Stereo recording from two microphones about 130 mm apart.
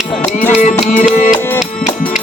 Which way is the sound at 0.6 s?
70° left (ahead or behind).